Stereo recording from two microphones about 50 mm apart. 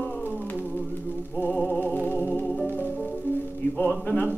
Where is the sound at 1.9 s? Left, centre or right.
Left.